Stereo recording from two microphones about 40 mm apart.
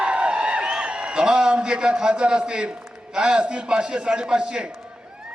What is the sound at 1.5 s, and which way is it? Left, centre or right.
A man's voice, right.